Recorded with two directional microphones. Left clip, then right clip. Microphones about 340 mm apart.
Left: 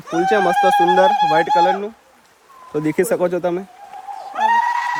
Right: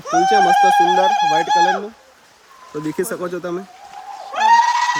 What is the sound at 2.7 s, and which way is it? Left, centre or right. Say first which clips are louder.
Speech: left 5 dB; centre.